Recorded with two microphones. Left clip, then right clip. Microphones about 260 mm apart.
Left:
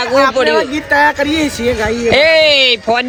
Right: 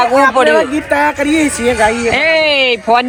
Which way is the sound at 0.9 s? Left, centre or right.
Left.